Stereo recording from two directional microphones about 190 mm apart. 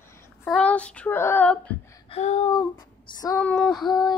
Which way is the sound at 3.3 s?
5° left (ahead or behind).